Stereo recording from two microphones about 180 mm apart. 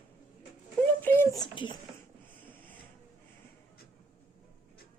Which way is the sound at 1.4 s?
25° left (ahead or behind).